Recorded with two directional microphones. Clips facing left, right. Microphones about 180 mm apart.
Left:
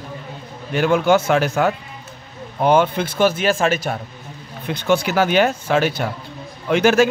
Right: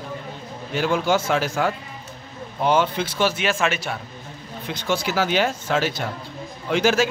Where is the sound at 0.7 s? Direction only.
60° left (ahead or behind); by 4.0 s 45° left (ahead or behind).